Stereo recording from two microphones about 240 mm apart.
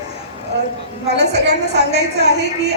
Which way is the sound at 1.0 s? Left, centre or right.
Right.